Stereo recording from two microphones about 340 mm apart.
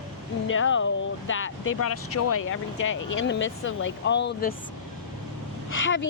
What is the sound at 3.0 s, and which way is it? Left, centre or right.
Speech, left.